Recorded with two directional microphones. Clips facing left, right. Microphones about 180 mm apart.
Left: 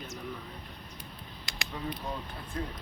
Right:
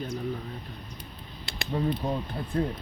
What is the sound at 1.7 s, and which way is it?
Speech, 35° right (ahead or behind).